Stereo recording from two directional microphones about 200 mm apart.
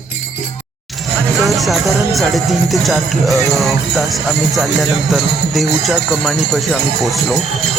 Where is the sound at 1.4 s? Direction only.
Centre (ahead or behind).